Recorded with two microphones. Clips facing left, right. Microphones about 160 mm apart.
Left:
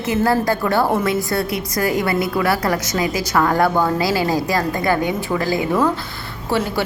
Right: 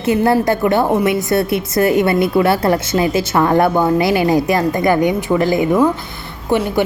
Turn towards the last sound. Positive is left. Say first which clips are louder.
# right 4 dB
turn(degrees=-20)  # may be behind; listen again after turning